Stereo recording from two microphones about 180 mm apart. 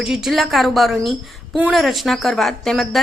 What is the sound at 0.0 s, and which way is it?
A woman's voice, centre (ahead or behind).